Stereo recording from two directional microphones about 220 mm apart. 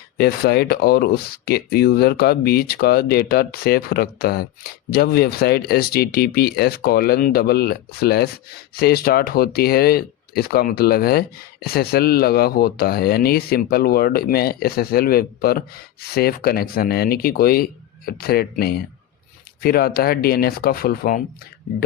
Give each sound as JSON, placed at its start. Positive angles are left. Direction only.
{"t": 0.2, "sound": "speech", "side_deg": 45}